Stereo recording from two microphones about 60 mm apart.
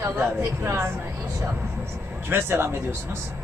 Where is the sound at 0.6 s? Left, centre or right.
Right.